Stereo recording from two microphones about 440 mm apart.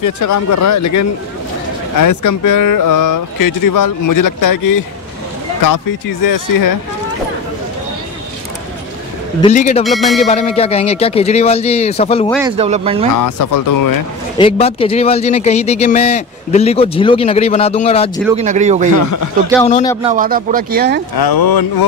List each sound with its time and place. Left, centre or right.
0.0 s speech: left
6.2 s speech: left
9.4 s speech: centre
9.8 s music: centre
10.2 s speech: centre
12.3 s speech: centre
14.4 s speech: centre
18.3 s speech: centre
19.7 s speech: centre
20.0 s speech: centre
21.2 s speech: left